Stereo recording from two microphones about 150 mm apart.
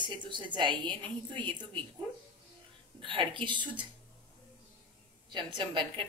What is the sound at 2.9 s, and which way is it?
Speech, 35° right (ahead or behind).